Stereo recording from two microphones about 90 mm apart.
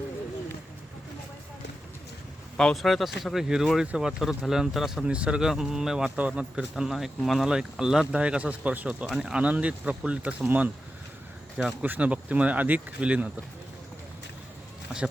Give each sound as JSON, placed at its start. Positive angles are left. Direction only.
{"t": 2.6, "sound": "speech", "side_deg": 5}